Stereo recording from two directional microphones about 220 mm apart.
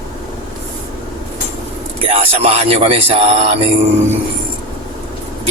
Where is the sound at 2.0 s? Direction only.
25° right (ahead or behind).